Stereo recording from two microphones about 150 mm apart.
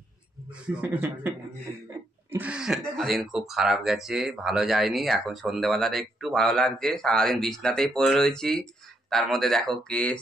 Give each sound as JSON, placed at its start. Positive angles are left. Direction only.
{"t": 0.7, "sound": "speech", "side_deg": -10}
{"t": 2.3, "sound": "speech", "side_deg": -10}